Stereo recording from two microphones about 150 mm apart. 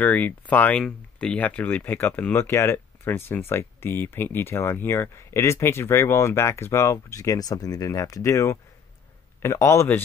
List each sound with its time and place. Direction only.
0.0 s speech: 10° left (ahead or behind)